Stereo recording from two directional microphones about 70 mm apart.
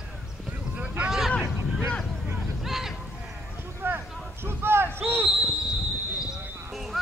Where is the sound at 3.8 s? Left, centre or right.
Right.